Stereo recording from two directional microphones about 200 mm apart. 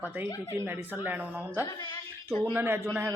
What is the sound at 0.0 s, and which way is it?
Speech, 10° right (ahead or behind).